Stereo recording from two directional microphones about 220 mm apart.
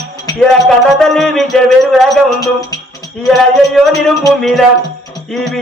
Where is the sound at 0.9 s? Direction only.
Centre (ahead or behind).